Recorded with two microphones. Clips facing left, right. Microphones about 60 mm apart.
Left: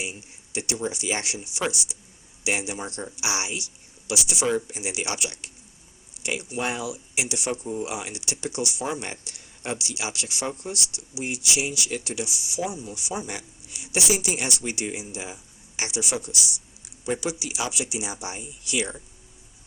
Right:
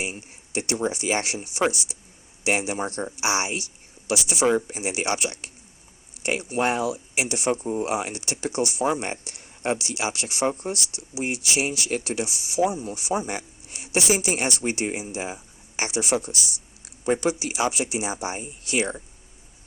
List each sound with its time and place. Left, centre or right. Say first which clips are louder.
0.0 s speech: right 3 dB; right